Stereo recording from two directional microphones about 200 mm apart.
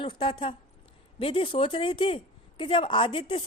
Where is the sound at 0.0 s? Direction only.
25° left (ahead or behind).